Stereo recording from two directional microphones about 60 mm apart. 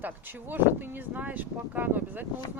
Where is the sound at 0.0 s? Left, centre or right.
Right.